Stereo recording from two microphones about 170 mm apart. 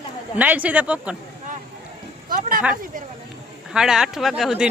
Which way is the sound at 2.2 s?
55° right (ahead or behind).